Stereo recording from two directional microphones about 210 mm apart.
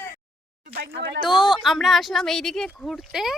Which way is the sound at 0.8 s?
55° right (ahead or behind).